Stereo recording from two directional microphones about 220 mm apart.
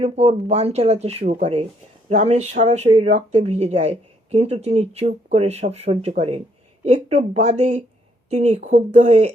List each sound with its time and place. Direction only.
0.0 s speech: 30° right (ahead or behind)